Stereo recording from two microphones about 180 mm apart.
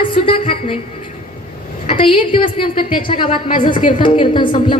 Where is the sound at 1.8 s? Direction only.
30° left (ahead or behind).